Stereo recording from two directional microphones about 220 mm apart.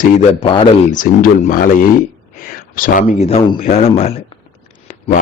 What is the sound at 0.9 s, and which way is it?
A man's voice, 40° left (ahead or behind).